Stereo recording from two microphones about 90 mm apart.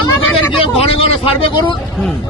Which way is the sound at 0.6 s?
90° left.